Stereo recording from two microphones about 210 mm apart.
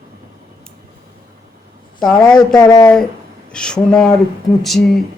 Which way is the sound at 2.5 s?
20° left (ahead or behind).